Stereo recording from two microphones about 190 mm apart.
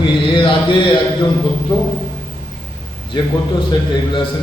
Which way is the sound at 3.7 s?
25° left (ahead or behind).